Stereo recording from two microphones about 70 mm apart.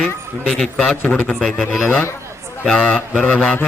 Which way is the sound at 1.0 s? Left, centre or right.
Left.